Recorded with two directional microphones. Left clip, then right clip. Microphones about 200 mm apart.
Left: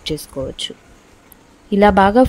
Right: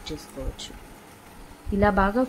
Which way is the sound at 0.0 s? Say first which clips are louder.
Left 12 dB; 45° left (ahead or behind).